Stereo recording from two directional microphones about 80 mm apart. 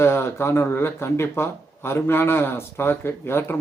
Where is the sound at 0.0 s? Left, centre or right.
Left.